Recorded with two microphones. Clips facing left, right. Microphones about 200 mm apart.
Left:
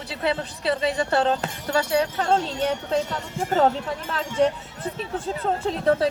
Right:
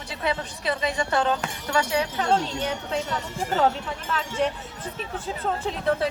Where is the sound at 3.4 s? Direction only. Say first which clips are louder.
Left 3 dB; 50° left (ahead or behind).